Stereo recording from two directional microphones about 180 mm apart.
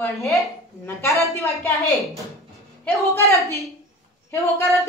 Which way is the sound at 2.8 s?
15° left (ahead or behind).